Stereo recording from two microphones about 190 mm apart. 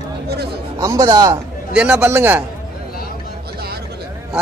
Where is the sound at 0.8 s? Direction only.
20° right (ahead or behind).